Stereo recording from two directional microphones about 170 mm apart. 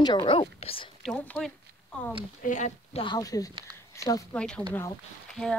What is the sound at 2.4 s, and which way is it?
Speech, 45° left (ahead or behind).